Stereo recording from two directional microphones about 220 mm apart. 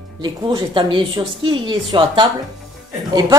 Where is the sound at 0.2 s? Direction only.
20° right (ahead or behind).